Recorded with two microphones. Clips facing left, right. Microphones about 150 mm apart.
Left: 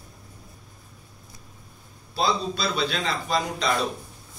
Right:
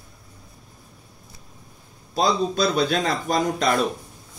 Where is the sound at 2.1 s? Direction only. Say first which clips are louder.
Right 4 dB; 45° right (ahead or behind).